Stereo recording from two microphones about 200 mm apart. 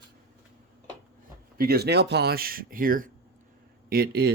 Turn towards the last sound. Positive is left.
turn(degrees=-50)  # may be behind; listen again after turning